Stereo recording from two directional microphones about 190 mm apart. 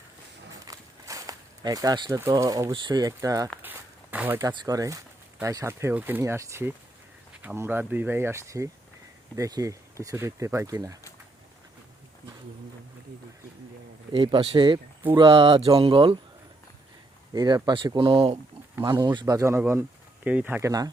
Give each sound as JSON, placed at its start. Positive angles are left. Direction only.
{"t": 0.7, "sound": "speech", "side_deg": -15}
{"t": 14.1, "sound": "speech", "side_deg": -25}
{"t": 17.3, "sound": "speech", "side_deg": -20}